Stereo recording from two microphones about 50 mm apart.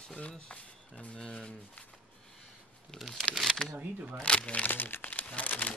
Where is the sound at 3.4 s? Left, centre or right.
Centre.